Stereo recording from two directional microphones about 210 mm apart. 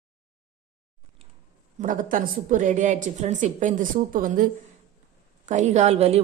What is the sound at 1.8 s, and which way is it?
A woman's voice, 40° right (ahead or behind).